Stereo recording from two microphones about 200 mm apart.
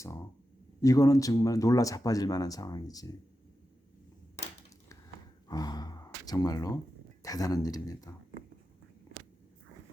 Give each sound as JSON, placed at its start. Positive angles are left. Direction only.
{"t": 0.8, "sound": "speech", "side_deg": 15}
{"t": 5.5, "sound": "gasp", "side_deg": 20}
{"t": 7.2, "sound": "speech", "side_deg": 15}